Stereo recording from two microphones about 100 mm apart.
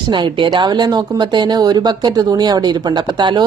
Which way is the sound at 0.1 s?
50° right (ahead or behind).